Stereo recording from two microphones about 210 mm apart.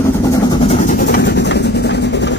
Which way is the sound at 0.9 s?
45° left (ahead or behind).